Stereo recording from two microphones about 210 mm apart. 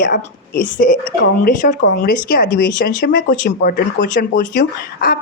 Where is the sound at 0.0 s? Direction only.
40° left (ahead or behind).